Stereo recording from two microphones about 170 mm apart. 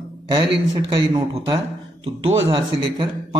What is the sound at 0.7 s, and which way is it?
A man's voice, 25° right (ahead or behind).